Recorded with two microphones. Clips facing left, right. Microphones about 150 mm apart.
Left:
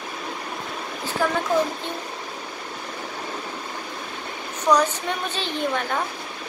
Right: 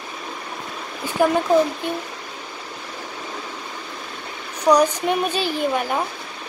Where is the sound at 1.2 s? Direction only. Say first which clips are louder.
Right 6 dB; 15° right (ahead or behind).